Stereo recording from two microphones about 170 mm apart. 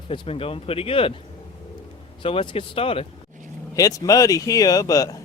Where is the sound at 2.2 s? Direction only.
35° left (ahead or behind).